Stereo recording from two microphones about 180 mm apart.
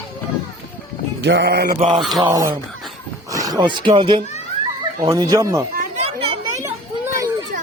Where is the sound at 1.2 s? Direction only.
75° right (ahead or behind); by 1.8 s 60° right (ahead or behind).